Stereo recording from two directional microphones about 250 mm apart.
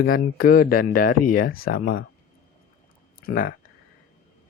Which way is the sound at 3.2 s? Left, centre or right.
Left.